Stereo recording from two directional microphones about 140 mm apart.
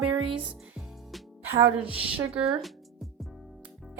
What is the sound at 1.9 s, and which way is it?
Speech, 40° right (ahead or behind).